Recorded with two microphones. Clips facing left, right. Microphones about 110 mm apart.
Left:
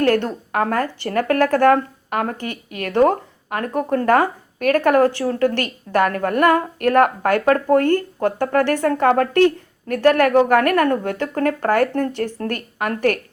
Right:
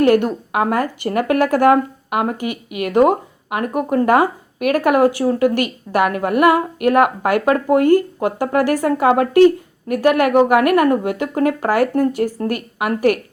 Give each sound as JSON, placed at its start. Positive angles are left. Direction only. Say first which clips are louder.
{"t": 0.0, "sound": "speech", "louder": "right 4 dB", "side_deg": -10}